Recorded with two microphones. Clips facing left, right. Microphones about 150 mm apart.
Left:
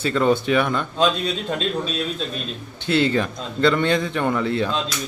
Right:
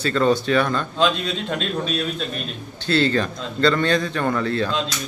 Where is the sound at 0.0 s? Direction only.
15° left (ahead or behind).